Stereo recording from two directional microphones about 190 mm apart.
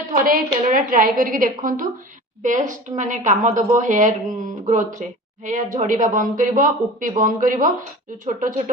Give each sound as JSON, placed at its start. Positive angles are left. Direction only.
{"t": 0.1, "sound": "a woman's voice", "side_deg": -45}